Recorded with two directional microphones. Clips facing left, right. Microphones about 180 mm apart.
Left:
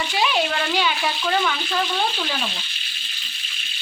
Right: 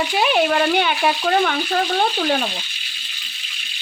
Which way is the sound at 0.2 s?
55° right (ahead or behind).